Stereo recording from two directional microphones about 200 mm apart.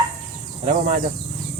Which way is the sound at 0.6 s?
35° right (ahead or behind).